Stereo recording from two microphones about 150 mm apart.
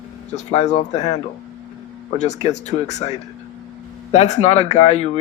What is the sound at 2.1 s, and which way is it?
Speech, 50° left (ahead or behind).